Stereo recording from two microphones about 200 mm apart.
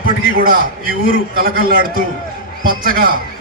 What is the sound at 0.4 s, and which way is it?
A man's voice, 45° right (ahead or behind).